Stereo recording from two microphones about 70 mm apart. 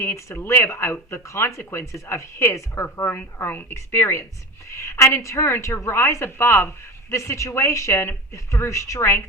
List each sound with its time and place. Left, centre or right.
0.0 s speech: left